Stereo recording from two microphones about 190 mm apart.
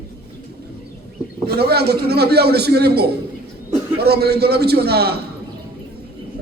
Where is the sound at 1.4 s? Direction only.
55° right (ahead or behind).